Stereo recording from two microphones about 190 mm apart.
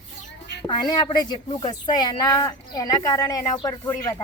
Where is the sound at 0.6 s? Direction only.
25° left (ahead or behind).